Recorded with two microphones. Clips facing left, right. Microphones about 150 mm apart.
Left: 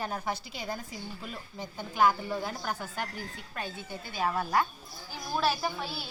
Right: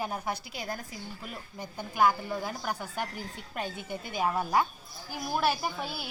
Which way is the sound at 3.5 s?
20° right (ahead or behind).